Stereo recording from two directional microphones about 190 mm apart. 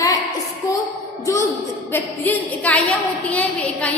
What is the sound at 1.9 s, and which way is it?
A woman's voice, 10° left (ahead or behind).